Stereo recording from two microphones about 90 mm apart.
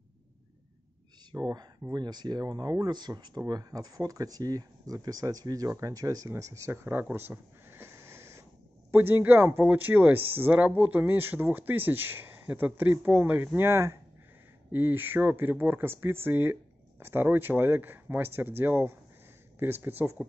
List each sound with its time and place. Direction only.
1.3 s speech: 50° right (ahead or behind); by 20.2 s 20° right (ahead or behind)